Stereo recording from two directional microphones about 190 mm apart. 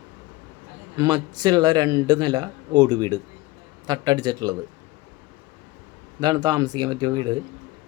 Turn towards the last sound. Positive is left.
turn(degrees=-20)  # may be behind; listen again after turning